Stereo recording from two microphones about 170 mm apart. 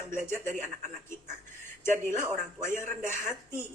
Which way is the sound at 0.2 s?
50° right (ahead or behind).